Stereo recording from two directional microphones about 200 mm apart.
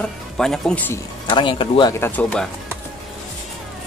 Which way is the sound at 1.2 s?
25° left (ahead or behind).